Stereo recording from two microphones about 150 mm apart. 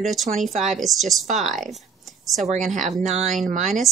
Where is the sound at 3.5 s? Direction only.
50° right (ahead or behind).